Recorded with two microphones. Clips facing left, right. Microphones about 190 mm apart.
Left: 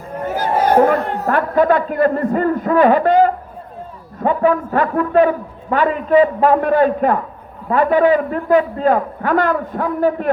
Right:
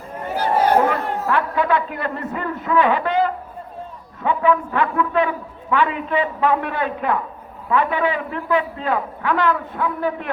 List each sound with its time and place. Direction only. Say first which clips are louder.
0.3 s a man's voice: left 3 dB; 45° left (ahead or behind)